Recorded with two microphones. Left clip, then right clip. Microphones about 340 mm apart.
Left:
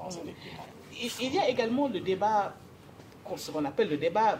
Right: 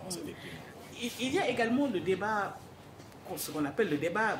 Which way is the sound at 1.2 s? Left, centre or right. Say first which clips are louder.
Left 2 dB; centre.